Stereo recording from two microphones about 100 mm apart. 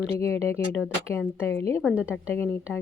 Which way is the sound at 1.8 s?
10° right (ahead or behind).